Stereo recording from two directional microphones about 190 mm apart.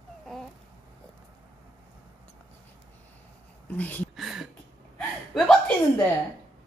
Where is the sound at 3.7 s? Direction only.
10° left (ahead or behind).